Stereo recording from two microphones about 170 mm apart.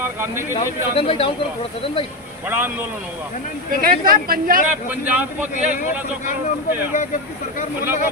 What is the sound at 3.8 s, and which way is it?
Speech, 60° right (ahead or behind).